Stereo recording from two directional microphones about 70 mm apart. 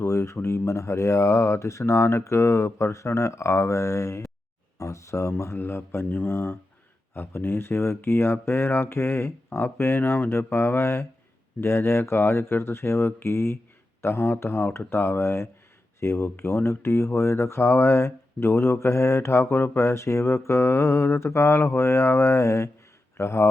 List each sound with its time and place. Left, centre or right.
0.0 s speech: left